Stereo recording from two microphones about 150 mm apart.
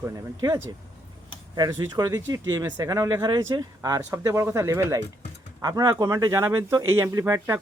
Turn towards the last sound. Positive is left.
turn(degrees=-20)  # may be behind; listen again after turning